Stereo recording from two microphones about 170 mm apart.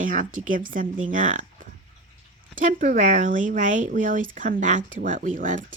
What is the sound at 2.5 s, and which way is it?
Speech, 50° right (ahead or behind).